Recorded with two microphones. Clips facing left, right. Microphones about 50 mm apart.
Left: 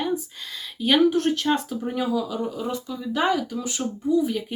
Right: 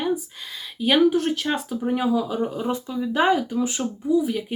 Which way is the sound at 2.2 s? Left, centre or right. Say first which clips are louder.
Right 3 dB; right.